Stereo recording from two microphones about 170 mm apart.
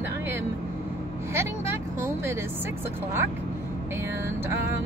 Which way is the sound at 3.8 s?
15° right (ahead or behind).